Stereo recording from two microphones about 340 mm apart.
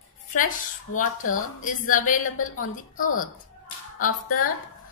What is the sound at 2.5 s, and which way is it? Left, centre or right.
Speech, left.